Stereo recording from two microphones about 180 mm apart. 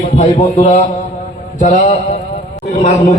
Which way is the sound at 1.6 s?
40° left (ahead or behind).